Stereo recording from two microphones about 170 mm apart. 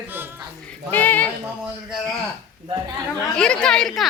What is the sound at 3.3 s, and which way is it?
Speech, 5° left (ahead or behind).